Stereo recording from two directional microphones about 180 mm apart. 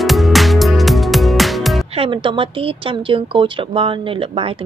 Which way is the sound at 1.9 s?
30° right (ahead or behind).